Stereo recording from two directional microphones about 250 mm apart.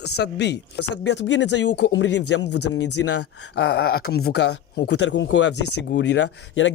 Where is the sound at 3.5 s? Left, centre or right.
Left.